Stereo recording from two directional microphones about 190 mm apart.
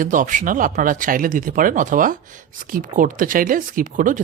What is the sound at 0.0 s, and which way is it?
Speech, 45° right (ahead or behind).